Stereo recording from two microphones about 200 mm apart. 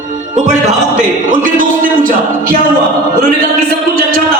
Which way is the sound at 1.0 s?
40° right (ahead or behind).